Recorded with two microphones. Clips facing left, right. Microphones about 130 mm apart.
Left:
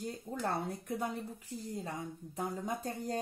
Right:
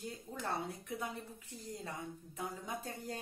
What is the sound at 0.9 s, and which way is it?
Speech, 35° left (ahead or behind).